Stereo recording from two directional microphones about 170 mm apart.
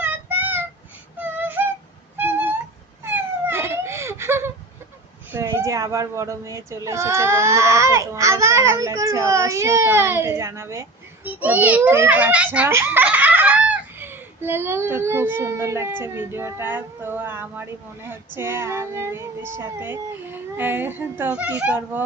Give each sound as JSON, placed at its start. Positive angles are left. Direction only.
{"t": 0.0, "sound": "child singing", "side_deg": -10}
{"t": 1.2, "sound": "a sound", "side_deg": -10}
{"t": 5.3, "sound": "speech", "side_deg": -15}